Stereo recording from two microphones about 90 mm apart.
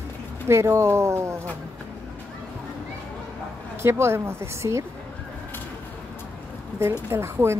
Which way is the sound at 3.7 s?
30° right (ahead or behind).